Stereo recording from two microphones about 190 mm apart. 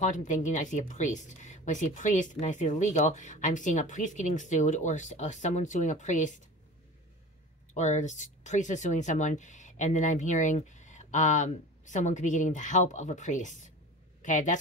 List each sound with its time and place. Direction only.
0.0 s speech: 40° left (ahead or behind)
7.7 s speech: 40° left (ahead or behind)